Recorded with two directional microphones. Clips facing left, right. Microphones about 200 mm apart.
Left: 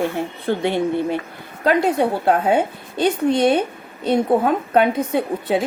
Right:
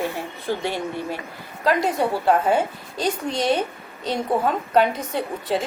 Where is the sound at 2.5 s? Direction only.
55° left (ahead or behind).